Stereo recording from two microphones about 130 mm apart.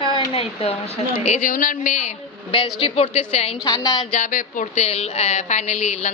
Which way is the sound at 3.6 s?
30° left (ahead or behind).